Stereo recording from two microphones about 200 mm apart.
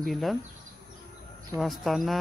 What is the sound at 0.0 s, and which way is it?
Speech, centre (ahead or behind).